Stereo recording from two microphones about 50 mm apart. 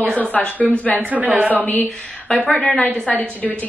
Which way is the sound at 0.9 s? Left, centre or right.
Right.